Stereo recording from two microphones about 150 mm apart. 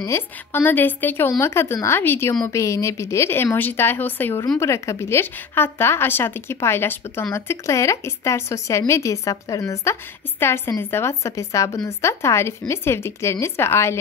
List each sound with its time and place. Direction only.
0.0 s speech: 15° left (ahead or behind)